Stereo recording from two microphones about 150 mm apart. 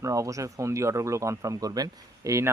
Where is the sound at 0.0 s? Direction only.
20° right (ahead or behind).